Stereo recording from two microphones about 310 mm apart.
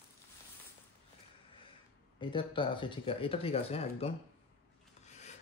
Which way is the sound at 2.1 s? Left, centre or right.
Centre.